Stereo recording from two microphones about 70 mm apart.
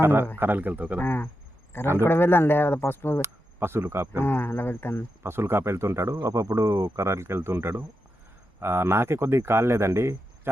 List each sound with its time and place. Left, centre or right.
0.0 s speech: right
1.0 s speech: left
3.2 s speech: right
4.2 s speech: left
5.2 s speech: right
6.1 s speech: right